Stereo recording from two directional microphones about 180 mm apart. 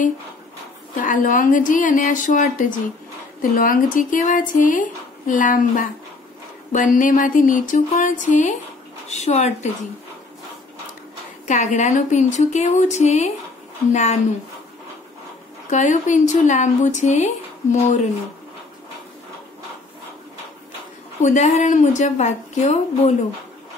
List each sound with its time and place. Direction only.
0.9 s speech: 45° left (ahead or behind)
11.4 s speech: 45° left (ahead or behind)
15.7 s speech: 45° left (ahead or behind)
21.2 s speech: 40° left (ahead or behind)